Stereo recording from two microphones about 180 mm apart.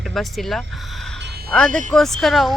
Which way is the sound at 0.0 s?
Centre (ahead or behind).